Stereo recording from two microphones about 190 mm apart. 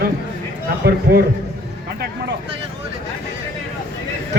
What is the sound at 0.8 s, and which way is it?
Speech, 50° right (ahead or behind).